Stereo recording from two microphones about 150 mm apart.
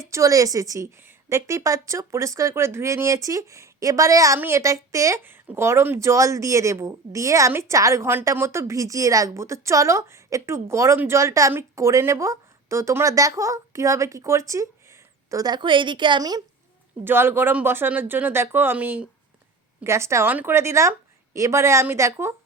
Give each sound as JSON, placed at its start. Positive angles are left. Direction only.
{"t": 0.1, "sound": "a woman's voice", "side_deg": -20}
{"t": 17.0, "sound": "a woman's voice", "side_deg": -15}